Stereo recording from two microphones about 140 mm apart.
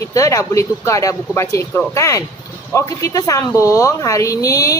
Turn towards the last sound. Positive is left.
turn(degrees=25)  # may be behind; listen again after turning